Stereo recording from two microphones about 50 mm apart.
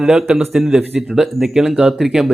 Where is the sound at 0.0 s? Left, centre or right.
Centre.